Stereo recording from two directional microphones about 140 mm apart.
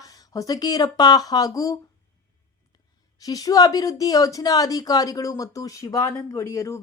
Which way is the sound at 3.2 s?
25° left (ahead or behind).